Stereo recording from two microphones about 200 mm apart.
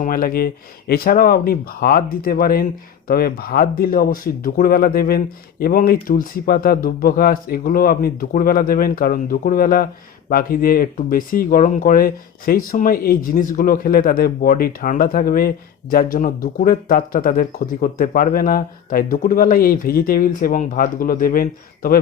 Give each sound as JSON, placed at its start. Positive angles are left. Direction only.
{"t": 0.0, "sound": "speech", "side_deg": 45}